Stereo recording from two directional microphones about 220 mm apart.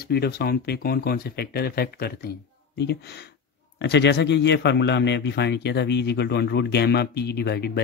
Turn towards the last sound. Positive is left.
turn(degrees=50)  # may be behind; listen again after turning